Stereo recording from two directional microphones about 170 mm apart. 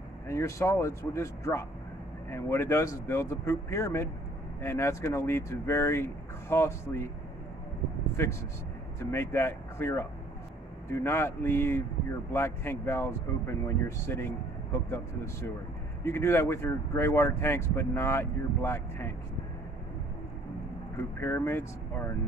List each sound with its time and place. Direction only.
0.3 s speech: 15° left (ahead or behind)
8.2 s speech: 15° left (ahead or behind)
16.0 s speech: 15° left (ahead or behind)
21.2 s speech: 15° left (ahead or behind)